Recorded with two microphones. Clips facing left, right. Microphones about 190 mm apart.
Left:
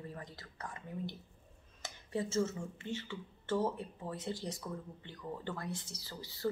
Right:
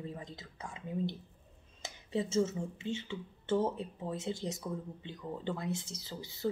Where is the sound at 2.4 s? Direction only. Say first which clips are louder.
Right 3 dB; 15° right (ahead or behind).